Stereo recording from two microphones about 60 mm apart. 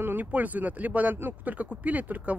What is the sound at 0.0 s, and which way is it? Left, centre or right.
Speech, right.